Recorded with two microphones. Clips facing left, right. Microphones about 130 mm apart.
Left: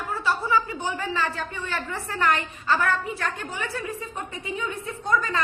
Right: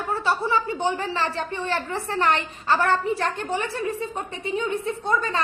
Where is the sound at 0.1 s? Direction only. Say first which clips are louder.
Right 1 dB; 30° right (ahead or behind).